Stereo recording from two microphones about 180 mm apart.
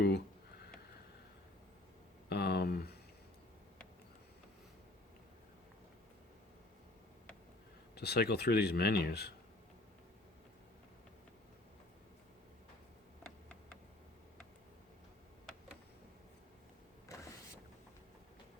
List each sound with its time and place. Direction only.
2.3 s a sound: 65° left (ahead or behind)
7.9 s speech: 65° left (ahead or behind)
17.1 s vehicle: 15° left (ahead or behind)